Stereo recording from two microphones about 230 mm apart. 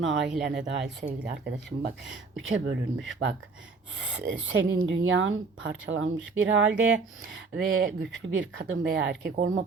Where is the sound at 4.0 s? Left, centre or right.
Right.